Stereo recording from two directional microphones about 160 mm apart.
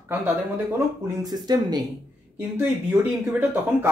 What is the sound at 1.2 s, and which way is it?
Speech, 25° right (ahead or behind).